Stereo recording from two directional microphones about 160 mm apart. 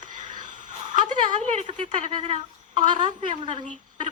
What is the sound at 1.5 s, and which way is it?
Speech, 45° right (ahead or behind).